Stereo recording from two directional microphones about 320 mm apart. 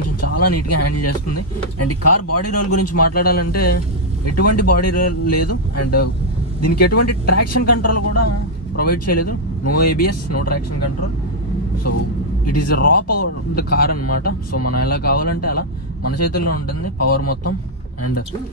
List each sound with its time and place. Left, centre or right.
0.2 s speech: left
3.1 s speech: left
4.4 s speech: left
12.4 s speech: left
12.7 s speech: left
13.0 s speech: left
13.6 s speech: left
14.5 s speech: left
14.9 s speech: left
15.2 s speech: left